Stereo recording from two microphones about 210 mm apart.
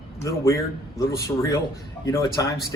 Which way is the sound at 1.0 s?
15° left (ahead or behind).